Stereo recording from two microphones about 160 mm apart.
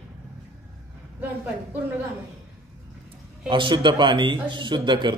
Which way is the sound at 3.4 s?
30° right (ahead or behind).